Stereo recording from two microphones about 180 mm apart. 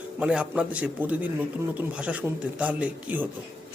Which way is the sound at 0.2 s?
5° right (ahead or behind).